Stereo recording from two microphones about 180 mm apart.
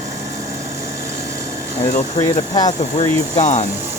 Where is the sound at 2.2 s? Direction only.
20° left (ahead or behind).